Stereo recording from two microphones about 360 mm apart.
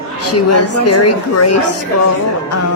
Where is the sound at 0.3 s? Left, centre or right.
Left.